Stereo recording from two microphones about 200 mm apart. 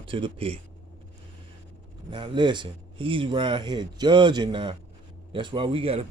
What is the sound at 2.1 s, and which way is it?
A man's voice, 25° right (ahead or behind).